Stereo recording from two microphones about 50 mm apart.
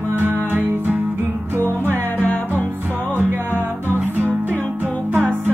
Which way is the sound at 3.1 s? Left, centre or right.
Right.